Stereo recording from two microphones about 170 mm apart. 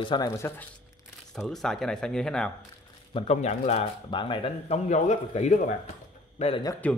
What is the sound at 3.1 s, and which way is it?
A man's voice, 35° left (ahead or behind).